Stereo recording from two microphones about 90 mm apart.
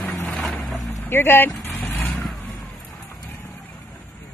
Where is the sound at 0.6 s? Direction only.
Centre (ahead or behind).